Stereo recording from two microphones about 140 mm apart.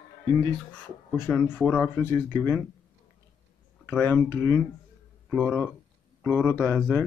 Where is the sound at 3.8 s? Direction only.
10° left (ahead or behind).